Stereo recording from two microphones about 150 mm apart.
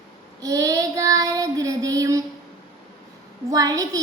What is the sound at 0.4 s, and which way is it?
Child singing, 25° right (ahead or behind).